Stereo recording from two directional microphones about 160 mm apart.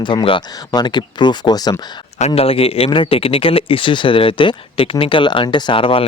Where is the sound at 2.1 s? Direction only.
40° left (ahead or behind).